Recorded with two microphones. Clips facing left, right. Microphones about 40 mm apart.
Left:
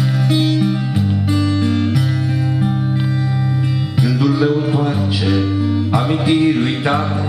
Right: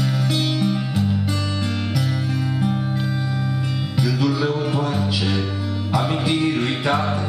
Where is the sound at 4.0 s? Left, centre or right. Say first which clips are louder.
Left 5 dB; centre.